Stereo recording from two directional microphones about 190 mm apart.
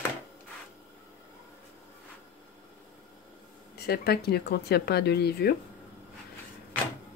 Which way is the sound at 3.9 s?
55° left (ahead or behind).